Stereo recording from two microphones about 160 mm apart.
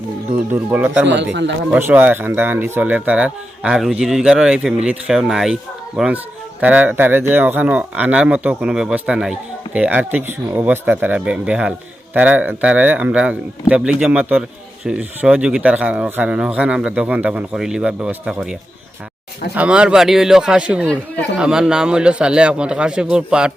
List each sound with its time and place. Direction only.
0.5 s speech: 10° right (ahead or behind)
1.0 s speech: 90° right
1.7 s a man's voice: 10° right (ahead or behind)
19.5 s a man's voice: 5° right (ahead or behind)